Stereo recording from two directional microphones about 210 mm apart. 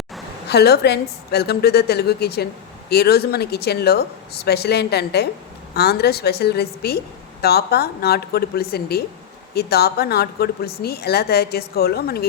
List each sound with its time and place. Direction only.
0.4 s speech: 50° left (ahead or behind)